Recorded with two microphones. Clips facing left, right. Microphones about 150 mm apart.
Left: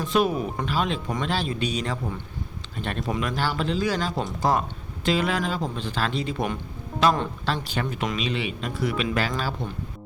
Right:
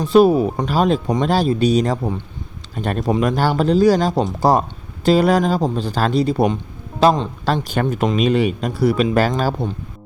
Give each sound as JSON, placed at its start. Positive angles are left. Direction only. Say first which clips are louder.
{"t": 0.0, "sound": "speech", "louder": "right 11 dB", "side_deg": -35}